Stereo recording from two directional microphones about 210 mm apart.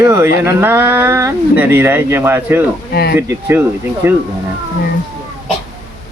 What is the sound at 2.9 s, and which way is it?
Speech, 50° left (ahead or behind).